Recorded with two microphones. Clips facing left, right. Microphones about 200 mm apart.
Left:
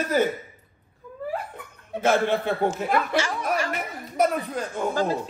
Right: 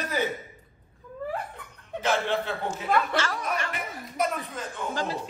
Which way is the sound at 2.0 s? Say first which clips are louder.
Left 5 dB; 50° left (ahead or behind).